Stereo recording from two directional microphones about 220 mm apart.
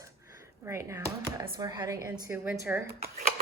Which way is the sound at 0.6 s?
10° right (ahead or behind).